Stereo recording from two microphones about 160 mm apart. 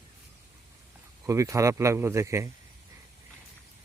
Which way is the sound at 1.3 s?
20° right (ahead or behind).